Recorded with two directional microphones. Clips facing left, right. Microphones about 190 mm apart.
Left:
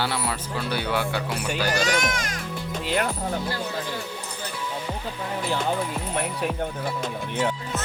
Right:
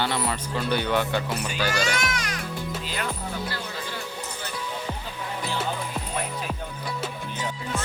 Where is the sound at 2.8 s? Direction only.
60° left (ahead or behind).